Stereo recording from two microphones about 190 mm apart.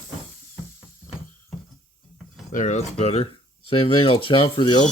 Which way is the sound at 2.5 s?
40° left (ahead or behind).